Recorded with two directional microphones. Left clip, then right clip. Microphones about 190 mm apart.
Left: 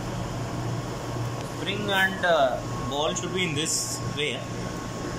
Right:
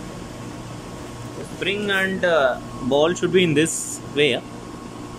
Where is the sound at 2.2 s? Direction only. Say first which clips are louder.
Right 3 dB; 50° right (ahead or behind).